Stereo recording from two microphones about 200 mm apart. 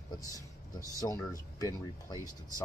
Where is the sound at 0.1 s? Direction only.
15° left (ahead or behind).